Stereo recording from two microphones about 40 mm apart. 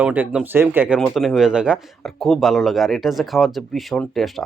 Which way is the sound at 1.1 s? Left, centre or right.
Centre.